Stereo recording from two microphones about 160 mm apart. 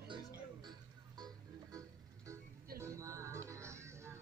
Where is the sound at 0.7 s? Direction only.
25° right (ahead or behind).